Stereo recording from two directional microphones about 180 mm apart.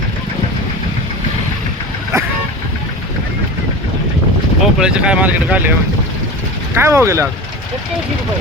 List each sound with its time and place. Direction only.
2.1 s vehicle: 15° right (ahead or behind)
4.6 s speech: 5° right (ahead or behind)
6.7 s speech: 15° right (ahead or behind)